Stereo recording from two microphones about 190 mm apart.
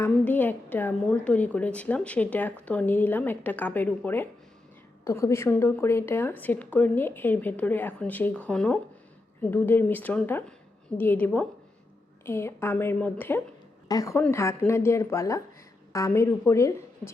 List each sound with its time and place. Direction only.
0.0 s a woman's voice: 10° left (ahead or behind)